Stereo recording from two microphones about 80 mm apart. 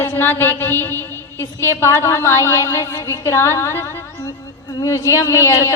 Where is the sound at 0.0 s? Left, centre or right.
Left.